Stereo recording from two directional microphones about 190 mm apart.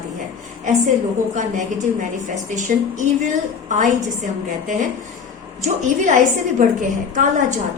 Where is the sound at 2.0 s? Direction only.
40° right (ahead or behind).